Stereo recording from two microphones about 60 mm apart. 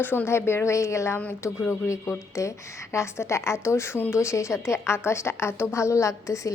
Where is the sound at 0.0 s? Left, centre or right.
Left.